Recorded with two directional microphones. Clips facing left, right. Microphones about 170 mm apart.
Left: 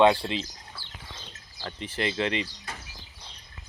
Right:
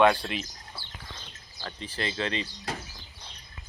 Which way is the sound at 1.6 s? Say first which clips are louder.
Left 3 dB; 25° left (ahead or behind).